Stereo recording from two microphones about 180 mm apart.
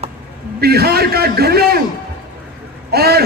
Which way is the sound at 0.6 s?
60° right (ahead or behind).